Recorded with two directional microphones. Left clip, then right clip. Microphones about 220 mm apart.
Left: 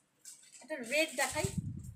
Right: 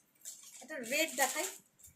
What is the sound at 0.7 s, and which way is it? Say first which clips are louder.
Speech: left 2 dB; 15° left (ahead or behind).